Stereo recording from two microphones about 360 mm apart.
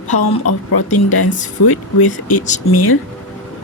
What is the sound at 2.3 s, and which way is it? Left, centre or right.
Speech, centre.